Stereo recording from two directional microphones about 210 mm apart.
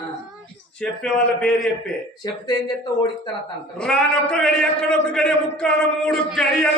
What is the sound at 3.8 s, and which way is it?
A man's voice, 5° left (ahead or behind).